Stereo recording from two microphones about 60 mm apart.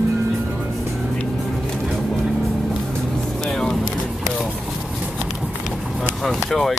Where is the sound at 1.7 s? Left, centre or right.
Centre.